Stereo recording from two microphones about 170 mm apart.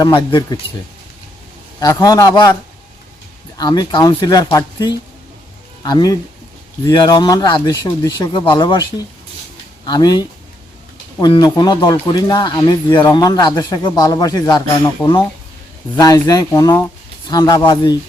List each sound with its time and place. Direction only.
0.0 s speech: 25° left (ahead or behind)
1.8 s speech: 20° left (ahead or behind)
3.6 s speech: 25° left (ahead or behind)